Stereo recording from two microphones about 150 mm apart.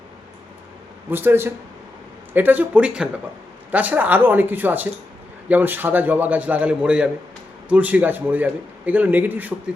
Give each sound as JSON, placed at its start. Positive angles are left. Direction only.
{"t": 1.1, "sound": "a man's voice", "side_deg": -15}